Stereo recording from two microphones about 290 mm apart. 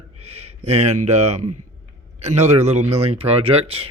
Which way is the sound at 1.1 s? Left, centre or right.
Right.